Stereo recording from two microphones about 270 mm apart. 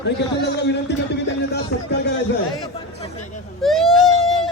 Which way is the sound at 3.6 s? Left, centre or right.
Centre.